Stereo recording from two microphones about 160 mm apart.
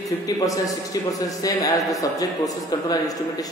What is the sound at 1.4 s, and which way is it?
A man's voice, 20° left (ahead or behind).